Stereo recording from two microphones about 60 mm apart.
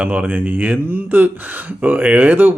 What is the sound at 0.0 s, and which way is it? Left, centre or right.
Speech, centre.